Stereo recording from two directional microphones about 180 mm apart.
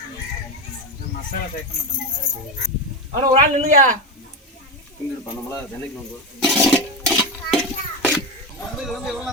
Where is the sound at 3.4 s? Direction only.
45° right (ahead or behind).